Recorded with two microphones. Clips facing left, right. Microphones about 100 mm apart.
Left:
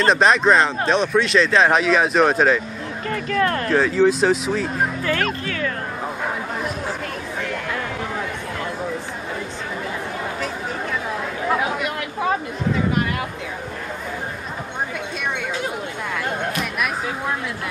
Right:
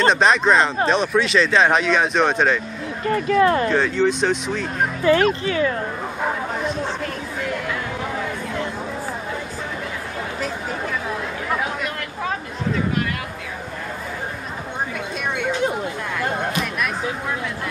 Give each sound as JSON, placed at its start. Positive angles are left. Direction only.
{"t": 0.0, "sound": "speech", "side_deg": 0}
{"t": 3.3, "sound": "speech", "side_deg": -10}
{"t": 3.6, "sound": "speech", "side_deg": 0}
{"t": 5.1, "sound": "speech", "side_deg": -15}
{"t": 11.5, "sound": "chatter", "side_deg": 5}
{"t": 16.2, "sound": "music", "side_deg": 0}